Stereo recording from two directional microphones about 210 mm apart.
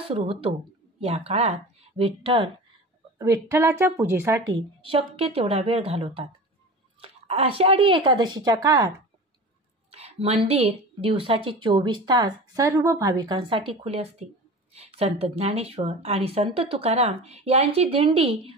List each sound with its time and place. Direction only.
0.0 s speech: 25° right (ahead or behind)
3.2 s speech: 15° right (ahead or behind)
4.6 s a woman's voice: 25° right (ahead or behind)
9.8 s a woman's voice: 30° right (ahead or behind)